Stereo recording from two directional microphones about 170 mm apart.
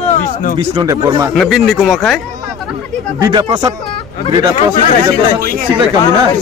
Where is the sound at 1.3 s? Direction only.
Centre (ahead or behind).